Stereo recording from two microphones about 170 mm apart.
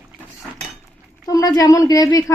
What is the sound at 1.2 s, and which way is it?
Speech, 20° left (ahead or behind).